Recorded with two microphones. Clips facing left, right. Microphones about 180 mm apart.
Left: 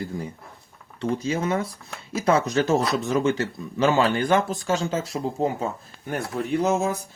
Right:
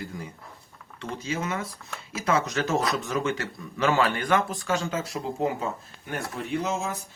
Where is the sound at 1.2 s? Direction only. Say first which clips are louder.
Left 2 dB; 35° left (ahead or behind).